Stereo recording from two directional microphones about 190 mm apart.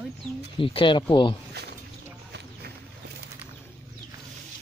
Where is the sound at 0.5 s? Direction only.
25° left (ahead or behind).